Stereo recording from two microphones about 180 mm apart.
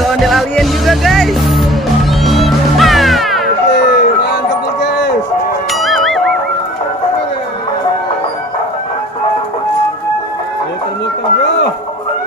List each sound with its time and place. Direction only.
0.0 s music: centre (ahead or behind)
3.6 s a sound: 70° left (ahead or behind)
5.7 s music: centre (ahead or behind)